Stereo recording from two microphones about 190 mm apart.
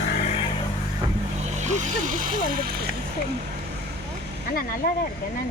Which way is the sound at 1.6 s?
40° right (ahead or behind).